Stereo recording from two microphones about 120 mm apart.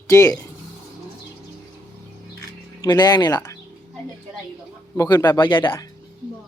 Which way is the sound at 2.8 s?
35° left (ahead or behind).